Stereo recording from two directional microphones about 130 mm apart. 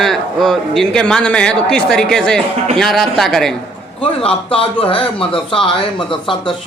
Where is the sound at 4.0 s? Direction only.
45° left (ahead or behind).